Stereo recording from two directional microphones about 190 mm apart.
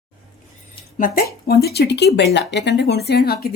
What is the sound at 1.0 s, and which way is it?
Speech, 50° left (ahead or behind).